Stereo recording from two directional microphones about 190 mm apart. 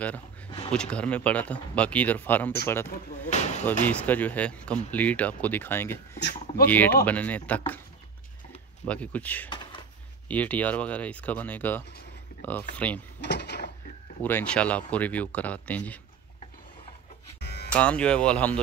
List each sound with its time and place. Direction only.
0.7 s speech: 5° left (ahead or behind)
3.3 s a sound: 35° left (ahead or behind)
3.8 s speech: 10° left (ahead or behind)
6.1 s a sound: 65° left (ahead or behind)
6.6 s speech: 10° left (ahead or behind)
8.8 s speech: 5° left (ahead or behind)
9.5 s a sound: 25° left (ahead or behind)
10.2 s speech: 10° left (ahead or behind)
13.2 s drawer open or close: 65° left (ahead or behind)
14.2 s speech: 10° left (ahead or behind)
17.4 s a sound: 60° left (ahead or behind)
17.7 s speech: 5° left (ahead or behind)